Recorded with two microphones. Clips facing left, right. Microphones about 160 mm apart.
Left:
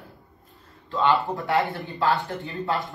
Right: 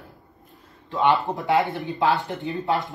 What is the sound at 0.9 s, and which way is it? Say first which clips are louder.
Speech: right 1 dB; 20° right (ahead or behind).